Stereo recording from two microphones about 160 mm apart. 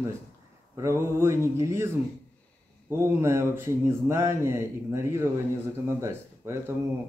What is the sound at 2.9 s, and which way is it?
A man's voice, 15° right (ahead or behind).